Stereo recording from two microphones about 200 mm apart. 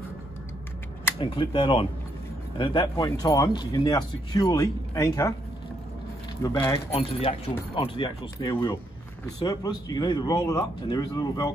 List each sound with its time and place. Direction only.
1.2 s speech: 25° left (ahead or behind)
6.4 s speech: 15° left (ahead or behind)
6.9 s speech: 30° left (ahead or behind)